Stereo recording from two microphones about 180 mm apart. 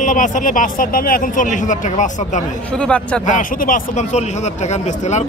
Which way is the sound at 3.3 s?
45° left (ahead or behind).